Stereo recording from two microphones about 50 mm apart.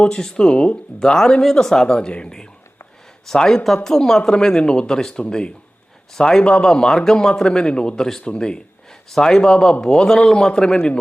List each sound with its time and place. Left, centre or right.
0.0 s speech: centre